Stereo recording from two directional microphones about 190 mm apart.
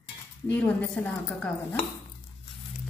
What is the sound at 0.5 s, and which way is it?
Speech, 5° left (ahead or behind).